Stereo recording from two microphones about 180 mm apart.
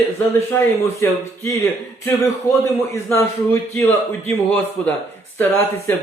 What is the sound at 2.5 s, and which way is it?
Speech, 15° left (ahead or behind).